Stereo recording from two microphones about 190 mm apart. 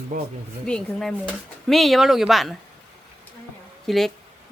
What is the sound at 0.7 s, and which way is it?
Speech, 5° left (ahead or behind).